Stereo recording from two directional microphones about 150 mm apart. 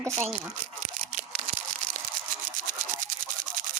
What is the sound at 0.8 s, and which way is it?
Toothbrush, 55° right (ahead or behind).